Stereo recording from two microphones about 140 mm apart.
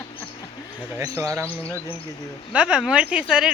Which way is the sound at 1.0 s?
20° right (ahead or behind).